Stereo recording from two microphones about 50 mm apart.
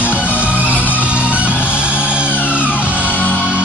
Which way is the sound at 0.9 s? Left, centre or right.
Right.